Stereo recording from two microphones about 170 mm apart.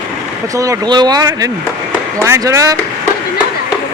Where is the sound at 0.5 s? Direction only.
20° right (ahead or behind).